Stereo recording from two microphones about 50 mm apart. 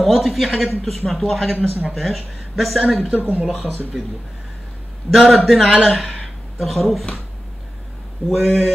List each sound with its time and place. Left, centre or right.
0.0 s speech: centre
3.1 s speech: right
3.9 s speech: centre
5.1 s speech: centre
8.3 s speech: centre